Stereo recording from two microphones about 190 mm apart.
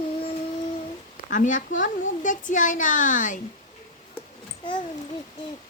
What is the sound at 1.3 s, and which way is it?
A woman's voice, 40° left (ahead or behind).